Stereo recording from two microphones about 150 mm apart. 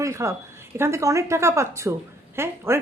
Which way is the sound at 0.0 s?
20° right (ahead or behind).